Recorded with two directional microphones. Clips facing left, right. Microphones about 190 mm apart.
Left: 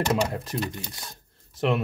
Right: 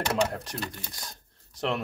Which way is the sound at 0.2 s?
5° left (ahead or behind).